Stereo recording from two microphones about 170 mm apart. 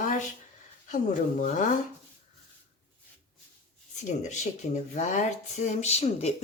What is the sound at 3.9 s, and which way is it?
Speech, 45° left (ahead or behind).